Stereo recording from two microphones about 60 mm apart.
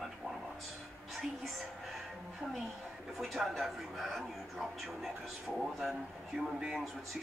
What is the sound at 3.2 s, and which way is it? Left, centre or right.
A man's voice, centre.